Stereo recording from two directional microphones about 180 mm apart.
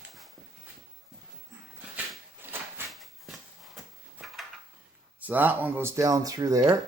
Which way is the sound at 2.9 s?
Centre (ahead or behind).